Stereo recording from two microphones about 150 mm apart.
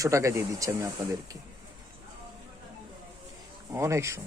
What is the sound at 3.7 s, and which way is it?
Speech, 20° right (ahead or behind).